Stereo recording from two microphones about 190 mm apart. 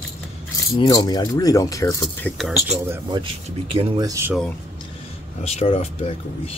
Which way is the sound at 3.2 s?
25° right (ahead or behind).